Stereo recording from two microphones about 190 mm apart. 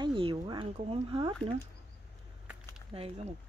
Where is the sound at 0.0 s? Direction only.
25° right (ahead or behind).